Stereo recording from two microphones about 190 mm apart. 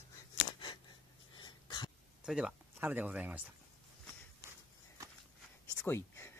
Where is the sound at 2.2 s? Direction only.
5° right (ahead or behind).